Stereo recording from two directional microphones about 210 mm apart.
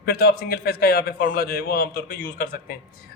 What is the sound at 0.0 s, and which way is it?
A man's voice, 50° left (ahead or behind).